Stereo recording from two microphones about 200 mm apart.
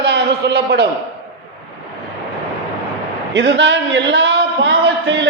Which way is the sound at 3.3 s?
60° right (ahead or behind).